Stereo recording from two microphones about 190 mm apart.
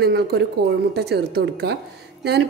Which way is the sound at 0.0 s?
60° right (ahead or behind).